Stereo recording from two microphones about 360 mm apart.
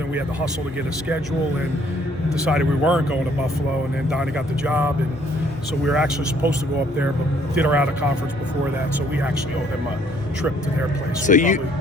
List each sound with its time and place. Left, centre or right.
2.4 s speech: centre
7.5 s speech: centre
11.3 s speech: left